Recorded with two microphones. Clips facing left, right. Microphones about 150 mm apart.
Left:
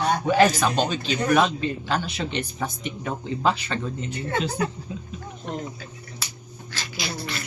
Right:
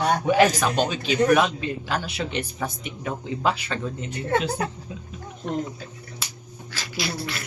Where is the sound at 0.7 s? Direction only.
10° right (ahead or behind).